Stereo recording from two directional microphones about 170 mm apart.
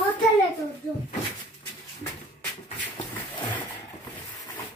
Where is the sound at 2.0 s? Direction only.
20° left (ahead or behind).